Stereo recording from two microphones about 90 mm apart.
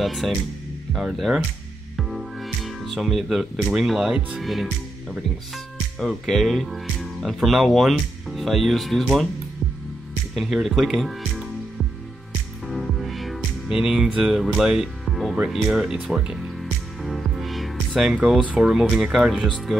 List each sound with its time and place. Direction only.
0.0 s speech: centre (ahead or behind)
5.9 s speech: centre (ahead or behind)
10.3 s speech: centre (ahead or behind)
12.6 s music: centre (ahead or behind)
15.5 s speech: 5° right (ahead or behind)
17.0 s music: centre (ahead or behind)
18.6 s speech: 5° right (ahead or behind)